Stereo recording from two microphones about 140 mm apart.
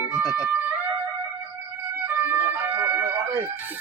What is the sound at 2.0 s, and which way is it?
Emergency vehicle, 15° right (ahead or behind).